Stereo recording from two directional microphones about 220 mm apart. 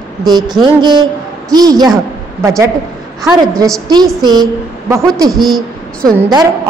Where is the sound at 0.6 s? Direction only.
20° right (ahead or behind).